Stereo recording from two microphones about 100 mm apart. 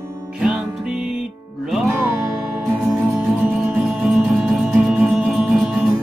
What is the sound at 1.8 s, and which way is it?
Music, 20° right (ahead or behind).